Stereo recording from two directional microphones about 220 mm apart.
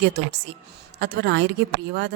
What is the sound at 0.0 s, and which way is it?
A woman's voice, 50° right (ahead or behind).